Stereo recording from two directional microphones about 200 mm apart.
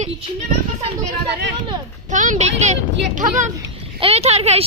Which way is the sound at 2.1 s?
40° right (ahead or behind).